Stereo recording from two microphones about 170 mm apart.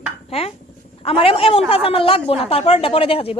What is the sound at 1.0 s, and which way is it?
Speech, 35° left (ahead or behind).